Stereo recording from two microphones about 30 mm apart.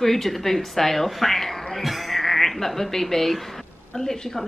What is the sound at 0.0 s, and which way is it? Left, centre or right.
Speech, centre.